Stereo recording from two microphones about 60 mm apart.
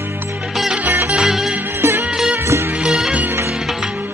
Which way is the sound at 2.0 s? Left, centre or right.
Centre.